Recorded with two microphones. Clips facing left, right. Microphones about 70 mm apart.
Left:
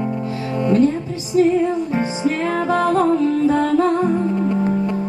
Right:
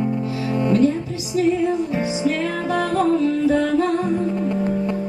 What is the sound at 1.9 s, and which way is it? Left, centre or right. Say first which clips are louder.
Music: left 1 dB; left.